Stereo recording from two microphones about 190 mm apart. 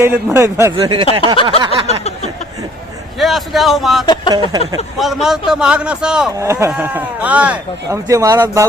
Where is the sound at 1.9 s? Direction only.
35° left (ahead or behind).